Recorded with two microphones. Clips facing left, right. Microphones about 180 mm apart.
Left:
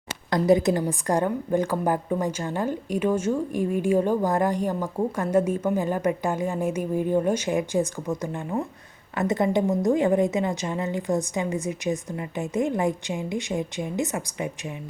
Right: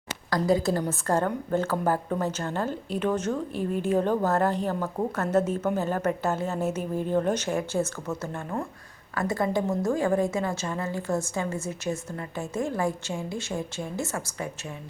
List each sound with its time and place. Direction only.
0.3 s speech: 20° left (ahead or behind)